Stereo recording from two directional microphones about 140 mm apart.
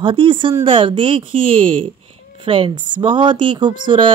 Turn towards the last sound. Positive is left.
turn(degrees=-35)  # may be behind; listen again after turning